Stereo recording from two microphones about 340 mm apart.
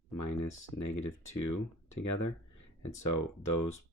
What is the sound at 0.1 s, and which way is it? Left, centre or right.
Speech, left.